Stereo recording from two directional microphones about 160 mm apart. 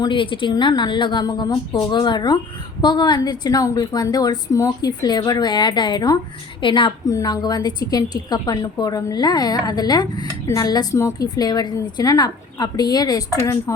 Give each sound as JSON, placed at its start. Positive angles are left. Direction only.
{"t": 0.0, "sound": "a woman's voice", "side_deg": 30}